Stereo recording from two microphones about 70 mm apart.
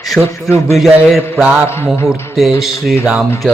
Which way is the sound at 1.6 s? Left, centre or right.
Left.